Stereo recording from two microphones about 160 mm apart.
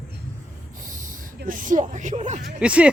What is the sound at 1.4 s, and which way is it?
Speech, 55° right (ahead or behind).